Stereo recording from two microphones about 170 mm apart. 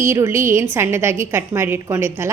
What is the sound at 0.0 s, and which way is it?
A woman's voice, 15° right (ahead or behind).